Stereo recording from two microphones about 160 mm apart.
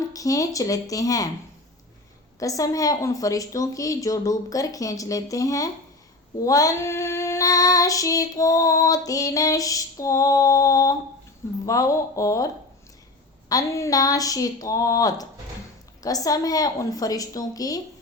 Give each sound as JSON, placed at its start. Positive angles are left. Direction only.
{"t": 0.1, "sound": "child singing", "side_deg": 20}
{"t": 2.4, "sound": "child singing", "side_deg": 20}
{"t": 13.5, "sound": "child singing", "side_deg": 20}